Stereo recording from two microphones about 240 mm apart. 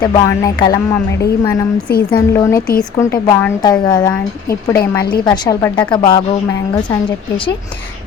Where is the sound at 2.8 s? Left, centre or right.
Centre.